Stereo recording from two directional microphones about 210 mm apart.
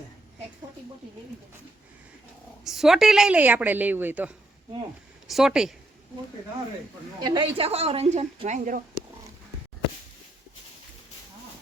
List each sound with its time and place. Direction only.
2.6 s a woman's voice: centre (ahead or behind)
5.3 s speech: 5° right (ahead or behind)
7.2 s a woman's voice: 20° right (ahead or behind); by 8.8 s 35° right (ahead or behind)